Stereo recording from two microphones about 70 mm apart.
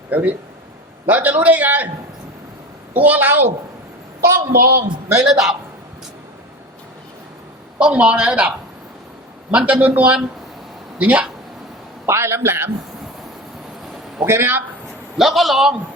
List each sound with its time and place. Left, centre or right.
0.1 s a man's voice: right
2.9 s a man's voice: right
4.2 s a woman's voice: right
7.8 s a man's voice: centre
12.0 s a man's voice: right
14.3 s a man's voice: right
15.2 s a man's voice: centre